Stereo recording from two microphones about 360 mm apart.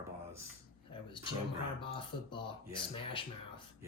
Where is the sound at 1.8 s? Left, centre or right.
Centre.